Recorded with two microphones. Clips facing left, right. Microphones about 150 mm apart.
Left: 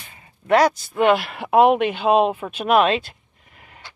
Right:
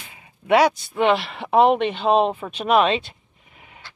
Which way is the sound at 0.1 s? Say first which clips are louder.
Even; 5° right (ahead or behind).